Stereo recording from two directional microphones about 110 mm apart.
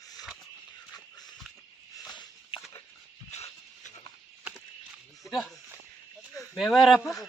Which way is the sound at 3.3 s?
90° left.